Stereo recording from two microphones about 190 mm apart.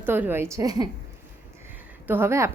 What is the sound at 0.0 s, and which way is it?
Speech, 10° right (ahead or behind).